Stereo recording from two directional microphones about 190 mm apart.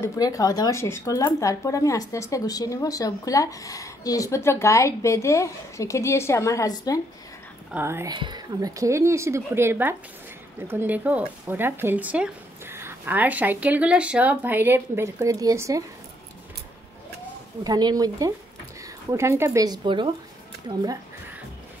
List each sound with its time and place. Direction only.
0.0 s speech: 15° left (ahead or behind)
7.7 s speech: 15° right (ahead or behind)
17.6 s speech: 20° right (ahead or behind)